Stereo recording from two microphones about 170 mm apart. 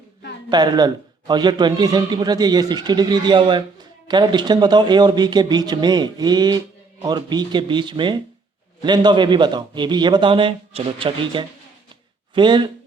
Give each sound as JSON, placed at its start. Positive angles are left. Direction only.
{"t": 0.5, "sound": "a man's voice", "side_deg": -25}